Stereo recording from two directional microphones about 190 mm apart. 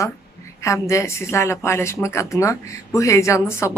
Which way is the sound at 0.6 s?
15° left (ahead or behind).